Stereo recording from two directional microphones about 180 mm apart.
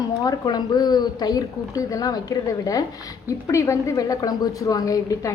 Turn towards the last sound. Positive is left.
turn(degrees=20)  # may be behind; listen again after turning